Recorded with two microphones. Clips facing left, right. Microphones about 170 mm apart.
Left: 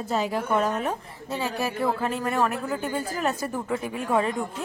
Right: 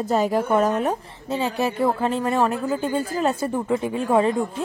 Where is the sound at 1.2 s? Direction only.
25° right (ahead or behind).